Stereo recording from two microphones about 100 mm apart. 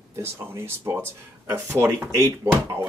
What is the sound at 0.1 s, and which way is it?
Speech, 25° right (ahead or behind).